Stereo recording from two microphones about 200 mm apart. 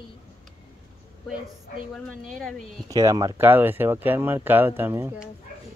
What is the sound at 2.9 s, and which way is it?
Speech, 15° right (ahead or behind).